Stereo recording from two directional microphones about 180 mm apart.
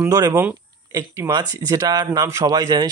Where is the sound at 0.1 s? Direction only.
20° right (ahead or behind).